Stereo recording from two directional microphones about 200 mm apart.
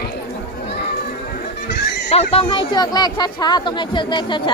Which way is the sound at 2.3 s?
25° left (ahead or behind).